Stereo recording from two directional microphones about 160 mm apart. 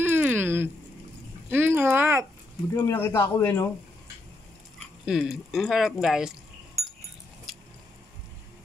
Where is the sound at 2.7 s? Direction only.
20° left (ahead or behind).